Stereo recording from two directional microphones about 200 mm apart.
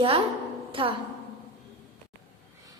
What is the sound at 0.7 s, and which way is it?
Speech, 25° right (ahead or behind).